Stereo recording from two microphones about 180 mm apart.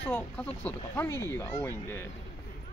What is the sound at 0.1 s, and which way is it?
Speech, 10° left (ahead or behind).